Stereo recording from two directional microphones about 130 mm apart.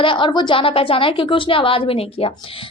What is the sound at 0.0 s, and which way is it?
A woman's voice, 40° left (ahead or behind).